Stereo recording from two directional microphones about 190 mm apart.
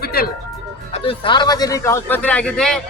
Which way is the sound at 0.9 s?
30° left (ahead or behind).